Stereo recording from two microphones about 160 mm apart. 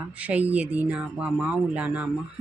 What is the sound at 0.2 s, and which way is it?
A woman's voice, 10° right (ahead or behind).